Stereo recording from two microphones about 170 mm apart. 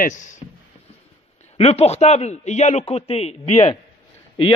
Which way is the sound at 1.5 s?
35° left (ahead or behind).